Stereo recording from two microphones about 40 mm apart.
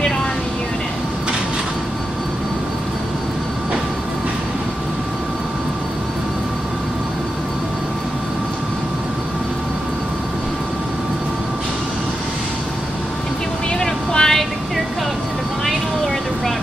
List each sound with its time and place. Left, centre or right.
13.7 s vehicle: centre